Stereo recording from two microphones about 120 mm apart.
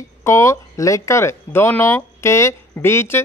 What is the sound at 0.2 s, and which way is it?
Speech, 25° left (ahead or behind).